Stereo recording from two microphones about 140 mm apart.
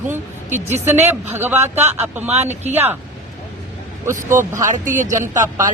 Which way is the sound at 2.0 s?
10° right (ahead or behind).